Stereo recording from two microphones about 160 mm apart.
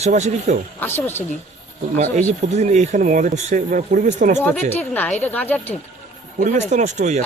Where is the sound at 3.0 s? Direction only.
55° right (ahead or behind).